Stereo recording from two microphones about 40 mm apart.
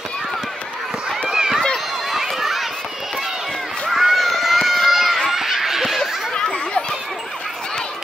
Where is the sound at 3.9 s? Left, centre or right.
Centre.